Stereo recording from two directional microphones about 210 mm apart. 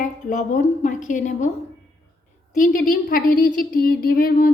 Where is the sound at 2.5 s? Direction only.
40° left (ahead or behind).